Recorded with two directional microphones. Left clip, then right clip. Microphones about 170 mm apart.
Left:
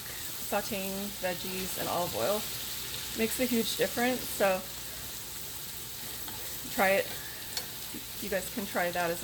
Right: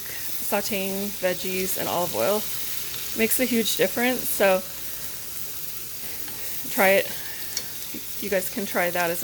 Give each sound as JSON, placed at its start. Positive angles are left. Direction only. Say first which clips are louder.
{"t": 0.5, "sound": "speech", "louder": "right 7 dB", "side_deg": -45}
{"t": 6.7, "sound": "speech", "louder": "right 7 dB", "side_deg": -45}
{"t": 8.3, "sound": "speech", "louder": "right 8 dB", "side_deg": -45}